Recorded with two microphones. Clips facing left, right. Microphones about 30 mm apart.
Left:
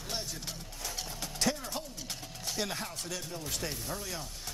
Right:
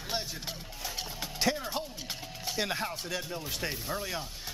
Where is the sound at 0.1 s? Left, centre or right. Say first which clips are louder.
Right 3 dB; right.